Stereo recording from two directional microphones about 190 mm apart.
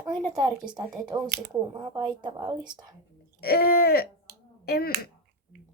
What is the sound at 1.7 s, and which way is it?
Speech, 25° right (ahead or behind).